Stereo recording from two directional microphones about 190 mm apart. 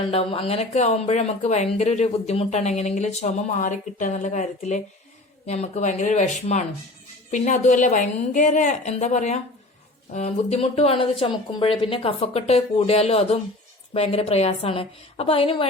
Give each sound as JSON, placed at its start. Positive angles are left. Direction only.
{"t": 0.1, "sound": "speech", "side_deg": 30}